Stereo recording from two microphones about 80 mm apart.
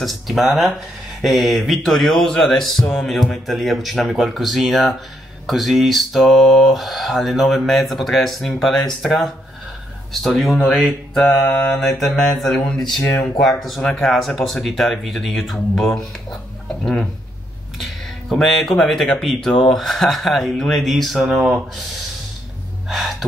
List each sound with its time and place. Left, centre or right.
0.0 s speech: centre
13.0 s speech: left
13.4 s speech: centre
22.8 s gasp: centre